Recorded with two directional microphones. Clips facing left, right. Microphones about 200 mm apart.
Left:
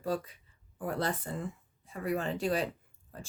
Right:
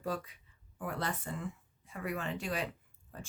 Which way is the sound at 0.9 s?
35° left (ahead or behind).